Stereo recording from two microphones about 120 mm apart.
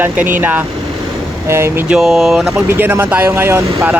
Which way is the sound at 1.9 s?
Centre (ahead or behind).